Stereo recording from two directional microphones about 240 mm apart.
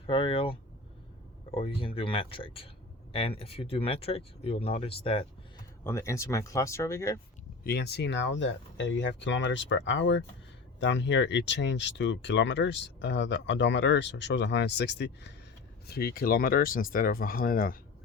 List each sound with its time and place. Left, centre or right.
0.0 s speech: left
5.8 s speech: centre
7.6 s speech: left